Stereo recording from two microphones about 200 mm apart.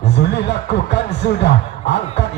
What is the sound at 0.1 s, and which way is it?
Speech, 60° left (ahead or behind).